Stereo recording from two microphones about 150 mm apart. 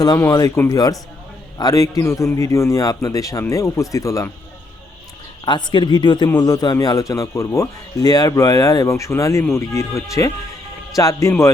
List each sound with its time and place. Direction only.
0.2 s speech: 25° left (ahead or behind)
5.5 s speech: 30° left (ahead or behind)